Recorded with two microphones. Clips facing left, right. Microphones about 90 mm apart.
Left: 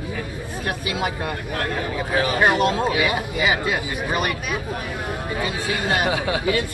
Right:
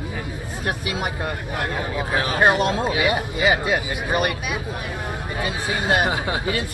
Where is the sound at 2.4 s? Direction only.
30° right (ahead or behind).